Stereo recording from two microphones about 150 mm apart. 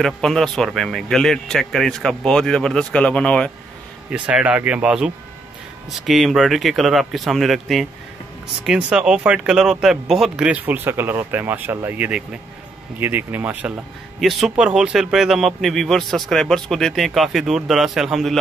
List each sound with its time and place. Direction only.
0.0 s a man's voice: 5° left (ahead or behind)
4.1 s a man's voice: 5° right (ahead or behind)